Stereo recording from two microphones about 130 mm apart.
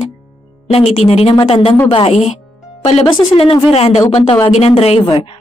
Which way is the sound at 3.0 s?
40° left (ahead or behind).